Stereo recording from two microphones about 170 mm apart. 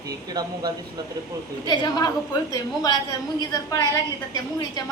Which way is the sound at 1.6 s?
25° left (ahead or behind).